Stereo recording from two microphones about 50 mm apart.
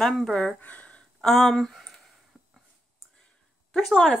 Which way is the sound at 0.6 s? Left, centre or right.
Left.